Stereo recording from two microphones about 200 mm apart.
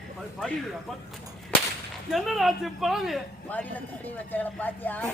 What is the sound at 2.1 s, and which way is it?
Speech, centre (ahead or behind).